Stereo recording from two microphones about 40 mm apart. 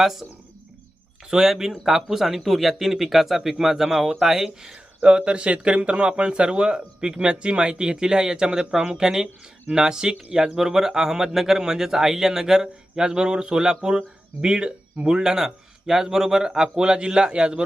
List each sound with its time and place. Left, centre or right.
0.0 s speech: centre
1.3 s speech: centre
4.7 s speech: right